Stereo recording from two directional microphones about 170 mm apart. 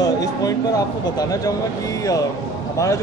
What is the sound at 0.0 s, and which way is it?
Speech, 20° left (ahead or behind).